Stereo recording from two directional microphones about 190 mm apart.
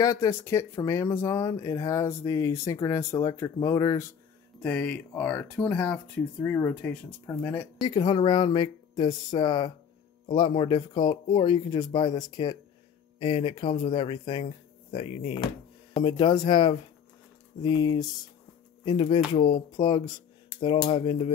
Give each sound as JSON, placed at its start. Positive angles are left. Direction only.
{"t": 0.0, "sound": "speech", "side_deg": 15}
{"t": 4.6, "sound": "speech", "side_deg": 10}
{"t": 7.9, "sound": "speech", "side_deg": 25}
{"t": 20.4, "sound": "speech", "side_deg": 25}